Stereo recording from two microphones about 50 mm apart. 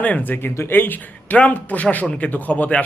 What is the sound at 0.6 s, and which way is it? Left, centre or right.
Speech, left.